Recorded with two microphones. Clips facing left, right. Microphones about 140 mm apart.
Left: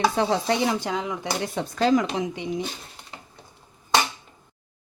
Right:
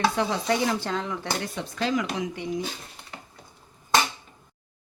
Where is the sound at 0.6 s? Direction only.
15° left (ahead or behind).